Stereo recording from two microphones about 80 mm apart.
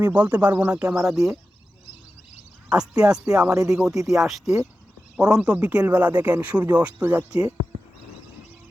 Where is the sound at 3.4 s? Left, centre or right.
Right.